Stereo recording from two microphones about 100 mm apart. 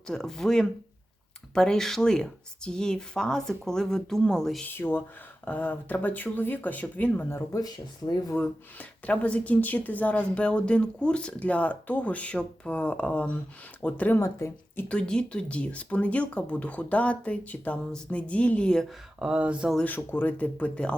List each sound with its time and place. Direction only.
0.1 s a woman's voice: 5° left (ahead or behind)
4.6 s a woman's voice: 20° left (ahead or behind)
7.3 s speech: 25° left (ahead or behind)
7.6 s speech: 45° left (ahead or behind)
8.4 s a woman's voice: 15° left (ahead or behind)
14.2 s speech: 30° left (ahead or behind)
14.8 s a woman's voice: 10° left (ahead or behind)
19.2 s speech: 10° right (ahead or behind)
20.0 s a woman's voice: 20° left (ahead or behind)